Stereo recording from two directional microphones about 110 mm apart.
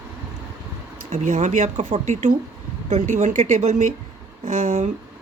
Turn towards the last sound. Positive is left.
turn(degrees=-90)